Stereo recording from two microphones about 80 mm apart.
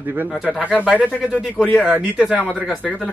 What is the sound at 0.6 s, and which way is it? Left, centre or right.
Speech, centre.